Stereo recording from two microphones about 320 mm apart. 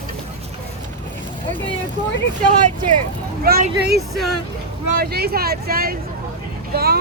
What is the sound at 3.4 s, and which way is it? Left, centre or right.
Speech, right.